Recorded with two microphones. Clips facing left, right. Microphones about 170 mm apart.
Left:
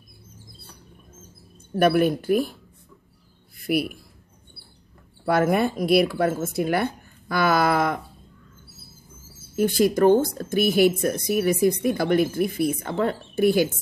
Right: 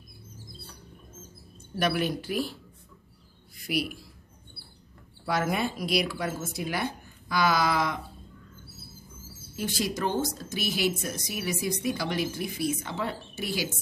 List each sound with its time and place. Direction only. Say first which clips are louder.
1.8 s speech: left 9 dB; 50° left (ahead or behind)
3.6 s speech: left 6 dB; 55° left (ahead or behind)
5.2 s speech: left 8 dB; 55° left (ahead or behind)
9.6 s speech: left 11 dB; 55° left (ahead or behind)